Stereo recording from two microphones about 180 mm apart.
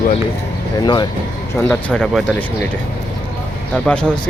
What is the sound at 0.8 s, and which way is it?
Speech, 25° left (ahead or behind).